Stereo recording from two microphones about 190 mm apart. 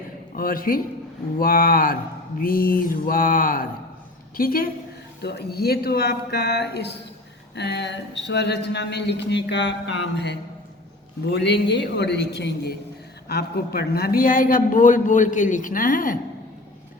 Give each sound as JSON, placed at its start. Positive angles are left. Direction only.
{"t": 0.3, "sound": "a man's voice", "side_deg": 50}